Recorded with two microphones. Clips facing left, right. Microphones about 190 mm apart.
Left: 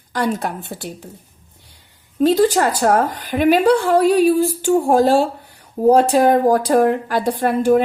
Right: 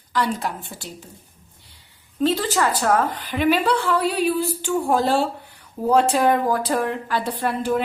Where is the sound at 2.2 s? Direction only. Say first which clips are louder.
Left 7 dB; 45° left (ahead or behind).